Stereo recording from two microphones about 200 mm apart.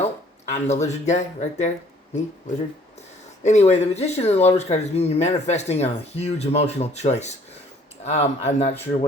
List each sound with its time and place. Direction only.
0.0 s speech: 35° left (ahead or behind)
3.4 s speech: 35° left (ahead or behind)